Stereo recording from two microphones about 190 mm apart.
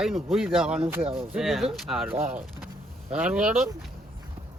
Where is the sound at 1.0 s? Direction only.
30° right (ahead or behind).